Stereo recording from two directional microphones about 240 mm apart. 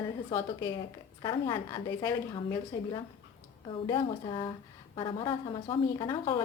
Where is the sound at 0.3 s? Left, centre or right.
Centre.